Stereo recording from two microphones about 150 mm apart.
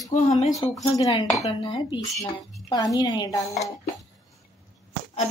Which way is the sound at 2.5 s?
25° left (ahead or behind).